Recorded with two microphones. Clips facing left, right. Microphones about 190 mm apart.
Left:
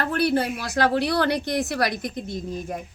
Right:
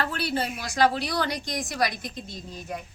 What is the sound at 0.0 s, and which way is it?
A woman's voice, 55° left (ahead or behind).